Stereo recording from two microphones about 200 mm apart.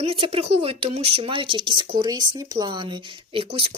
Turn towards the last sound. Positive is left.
turn(degrees=-25)  # may be behind; listen again after turning